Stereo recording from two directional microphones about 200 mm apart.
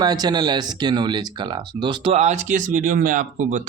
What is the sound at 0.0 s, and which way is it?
Speech, 20° right (ahead or behind).